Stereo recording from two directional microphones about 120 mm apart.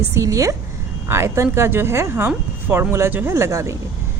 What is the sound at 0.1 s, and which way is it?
Speech, 25° right (ahead or behind).